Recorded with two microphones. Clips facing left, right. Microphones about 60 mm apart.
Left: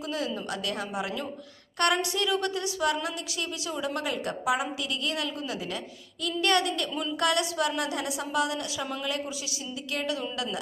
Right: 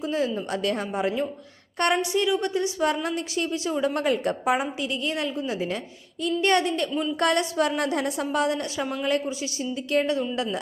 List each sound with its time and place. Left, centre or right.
0.0 s a woman's voice: right
1.8 s a woman's voice: right